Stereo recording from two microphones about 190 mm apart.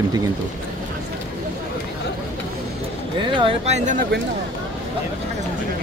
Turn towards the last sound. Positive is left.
turn(degrees=-40)  # may be behind; listen again after turning